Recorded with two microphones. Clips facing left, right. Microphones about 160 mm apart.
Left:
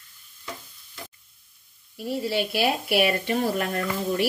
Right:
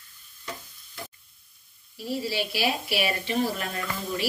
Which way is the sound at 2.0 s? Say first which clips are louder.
Left 3 dB; 55° left (ahead or behind).